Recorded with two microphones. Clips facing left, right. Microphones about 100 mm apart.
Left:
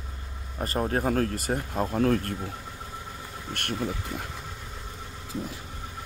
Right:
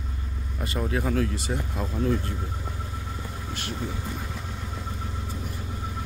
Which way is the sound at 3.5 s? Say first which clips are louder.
Left 3 dB; 60° left (ahead or behind).